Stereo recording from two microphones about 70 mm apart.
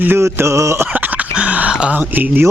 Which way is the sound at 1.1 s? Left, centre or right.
Right.